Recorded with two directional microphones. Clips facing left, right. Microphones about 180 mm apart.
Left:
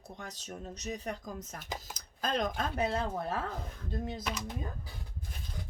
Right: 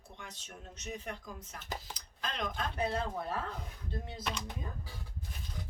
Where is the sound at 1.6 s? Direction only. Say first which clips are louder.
Left 1 dB; 10° left (ahead or behind).